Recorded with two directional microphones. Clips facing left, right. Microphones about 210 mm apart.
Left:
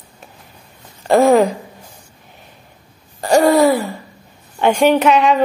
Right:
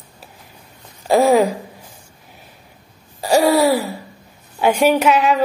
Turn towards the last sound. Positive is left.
turn(degrees=-5)  # may be behind; listen again after turning